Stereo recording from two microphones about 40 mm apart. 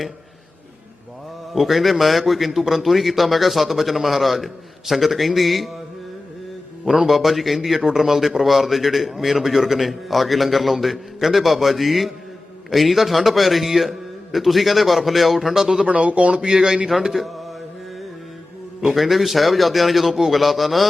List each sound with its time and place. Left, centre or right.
1.5 s a man's voice: centre
6.8 s a man's voice: centre
15.9 s speech: right
16.4 s speech: centre
17.0 s a man's voice: centre
18.8 s a man's voice: centre